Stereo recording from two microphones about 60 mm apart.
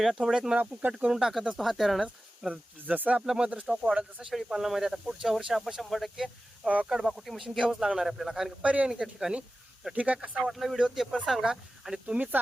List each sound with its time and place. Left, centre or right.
0.5 s speech: right
0.9 s speech: centre
2.5 s speech: right
3.2 s speech: centre
6.7 s speech: right
6.9 s speech: centre
8.6 s speech: right
8.9 s speech: centre
9.9 s speech: right
10.5 s speech: centre